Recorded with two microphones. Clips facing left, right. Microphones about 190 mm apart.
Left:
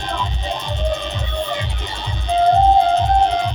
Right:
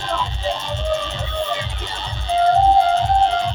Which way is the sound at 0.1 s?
15° left (ahead or behind).